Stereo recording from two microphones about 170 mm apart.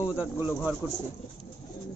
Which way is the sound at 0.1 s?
10° right (ahead or behind).